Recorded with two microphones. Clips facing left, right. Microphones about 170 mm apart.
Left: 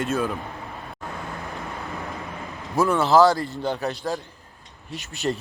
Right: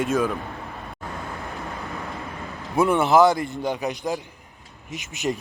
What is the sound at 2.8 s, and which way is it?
Speech, 20° right (ahead or behind).